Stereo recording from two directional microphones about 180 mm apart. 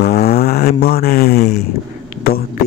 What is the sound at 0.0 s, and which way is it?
Mantra, 60° left (ahead or behind).